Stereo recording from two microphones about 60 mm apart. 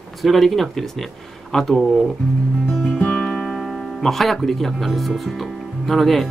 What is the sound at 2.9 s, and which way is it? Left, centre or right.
Music, centre.